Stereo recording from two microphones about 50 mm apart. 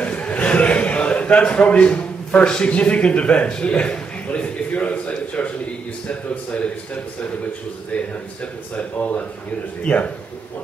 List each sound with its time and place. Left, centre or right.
0.0 s a man's voice: left
9.8 s speech: left